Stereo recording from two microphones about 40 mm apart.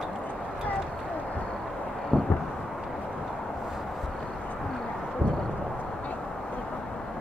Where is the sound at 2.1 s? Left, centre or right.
Left.